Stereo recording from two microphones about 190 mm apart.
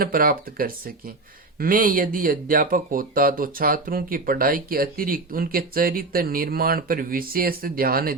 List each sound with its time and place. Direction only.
0.0 s speech: 50° right (ahead or behind)